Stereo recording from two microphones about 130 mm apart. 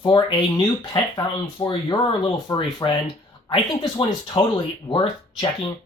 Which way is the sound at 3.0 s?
40° left (ahead or behind).